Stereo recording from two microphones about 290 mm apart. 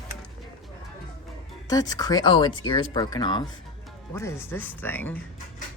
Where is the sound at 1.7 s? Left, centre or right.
Centre.